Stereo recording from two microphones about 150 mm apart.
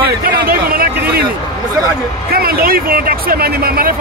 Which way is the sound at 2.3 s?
85° right.